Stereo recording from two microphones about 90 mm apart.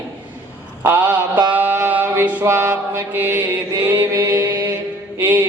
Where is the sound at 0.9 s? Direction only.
20° right (ahead or behind).